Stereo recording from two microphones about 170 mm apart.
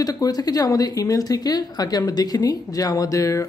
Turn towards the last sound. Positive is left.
turn(degrees=20)  # may be behind; listen again after turning